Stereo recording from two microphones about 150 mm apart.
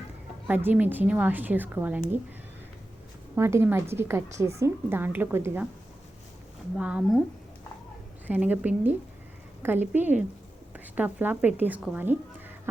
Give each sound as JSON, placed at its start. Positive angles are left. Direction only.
{"t": 0.4, "sound": "a woman's voice", "side_deg": -10}
{"t": 3.3, "sound": "a woman's voice", "side_deg": -15}
{"t": 6.7, "sound": "a woman's voice", "side_deg": -5}
{"t": 8.3, "sound": "a woman's voice", "side_deg": -10}